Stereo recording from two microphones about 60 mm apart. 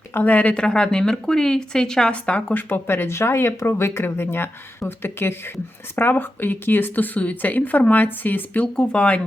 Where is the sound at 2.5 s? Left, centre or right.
Left.